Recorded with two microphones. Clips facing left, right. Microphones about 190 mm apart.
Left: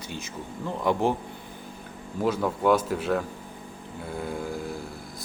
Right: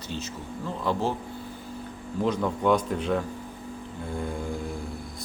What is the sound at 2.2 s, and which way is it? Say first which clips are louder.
A man's voice: left 1 dB; 5° left (ahead or behind).